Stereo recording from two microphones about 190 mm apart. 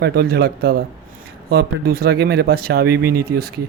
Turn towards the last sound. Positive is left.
turn(degrees=-55)  # may be behind; listen again after turning